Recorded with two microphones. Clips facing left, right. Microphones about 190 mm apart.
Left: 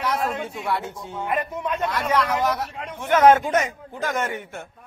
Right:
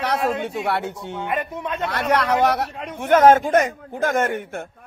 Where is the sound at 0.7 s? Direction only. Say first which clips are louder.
Right 3 dB; 70° right (ahead or behind).